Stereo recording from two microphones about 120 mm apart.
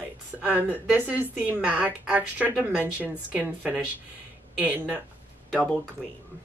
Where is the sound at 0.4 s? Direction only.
15° right (ahead or behind).